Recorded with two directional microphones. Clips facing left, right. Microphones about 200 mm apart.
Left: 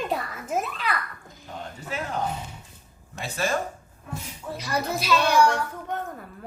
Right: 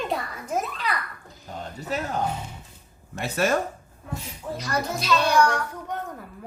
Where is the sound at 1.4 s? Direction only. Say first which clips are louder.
Right 2 dB; 40° right (ahead or behind).